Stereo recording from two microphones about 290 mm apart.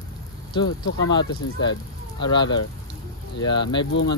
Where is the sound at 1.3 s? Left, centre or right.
Centre.